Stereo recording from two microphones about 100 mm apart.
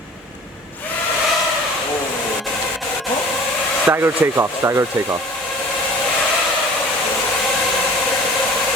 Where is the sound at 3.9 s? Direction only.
25° right (ahead or behind).